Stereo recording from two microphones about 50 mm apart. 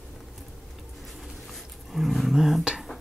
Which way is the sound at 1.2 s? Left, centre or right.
Centre.